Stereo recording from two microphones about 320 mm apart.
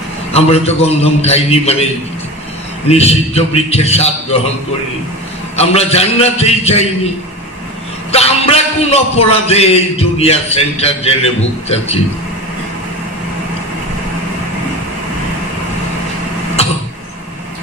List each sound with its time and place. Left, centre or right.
0.3 s a man's voice: centre
2.9 s a man's voice: centre
5.6 s a man's voice: centre
8.1 s a man's voice: centre